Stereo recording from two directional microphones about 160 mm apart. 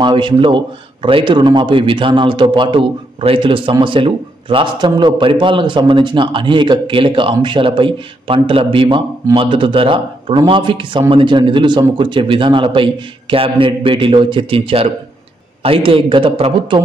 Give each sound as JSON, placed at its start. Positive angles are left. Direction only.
{"t": 0.0, "sound": "a man's voice", "side_deg": -30}